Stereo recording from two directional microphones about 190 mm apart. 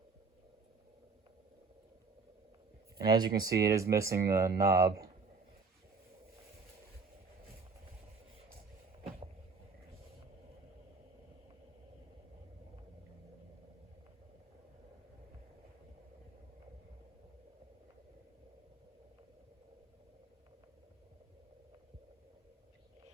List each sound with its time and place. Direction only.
3.0 s speech: 20° right (ahead or behind)